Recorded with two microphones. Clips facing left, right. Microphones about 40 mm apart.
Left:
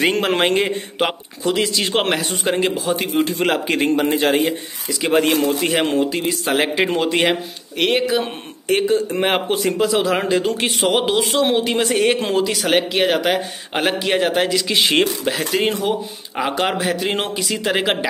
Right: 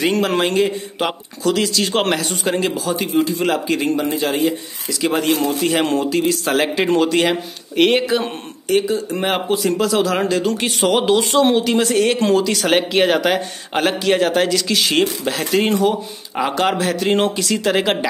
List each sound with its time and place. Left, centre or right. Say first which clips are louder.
0.0 s a man's voice: even; left
3.3 s a man's voice: even; left
5.7 s a man's voice: right 1 dB; centre
7.1 s speech: right 1 dB; left
7.7 s speech: right 3 dB; centre
8.6 s a man's voice: left 1 dB; left
9.7 s a man's voice: even; centre
12.4 s a man's voice: right 1 dB; centre
14.7 s speech: even; left
15.2 s a man's voice: right 1 dB; centre